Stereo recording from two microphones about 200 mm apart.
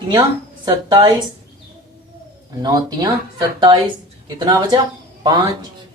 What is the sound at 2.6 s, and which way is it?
Speech, 20° right (ahead or behind).